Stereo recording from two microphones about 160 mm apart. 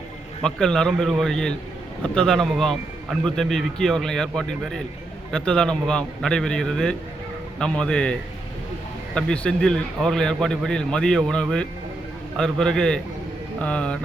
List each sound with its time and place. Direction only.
0.4 s a man's voice: 5° left (ahead or behind)
9.1 s a man's voice: 5° left (ahead or behind)